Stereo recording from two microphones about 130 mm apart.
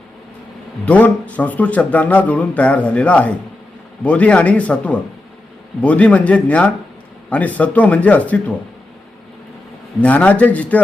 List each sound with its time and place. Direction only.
0.9 s speech: 10° left (ahead or behind)
10.0 s speech: 10° left (ahead or behind)